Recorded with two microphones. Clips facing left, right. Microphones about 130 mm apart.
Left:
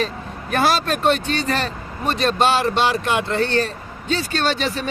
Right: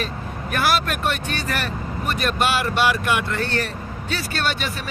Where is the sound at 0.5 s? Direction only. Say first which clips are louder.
Left 3 dB; 25° left (ahead or behind).